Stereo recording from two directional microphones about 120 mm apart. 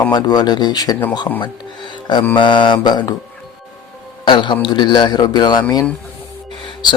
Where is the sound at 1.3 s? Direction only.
45° left (ahead or behind).